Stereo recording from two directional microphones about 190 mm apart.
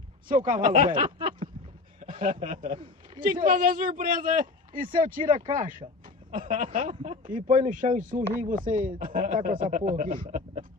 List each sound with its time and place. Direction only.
0.3 s speech: 45° right (ahead or behind)
0.9 s a sound: 25° right (ahead or behind)
2.0 s speech: 45° right (ahead or behind)